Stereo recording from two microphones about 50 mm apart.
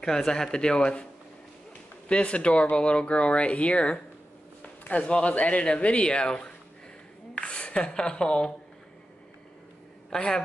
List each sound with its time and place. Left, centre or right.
0.0 s speech: centre
2.0 s speech: left
10.0 s a man's voice: centre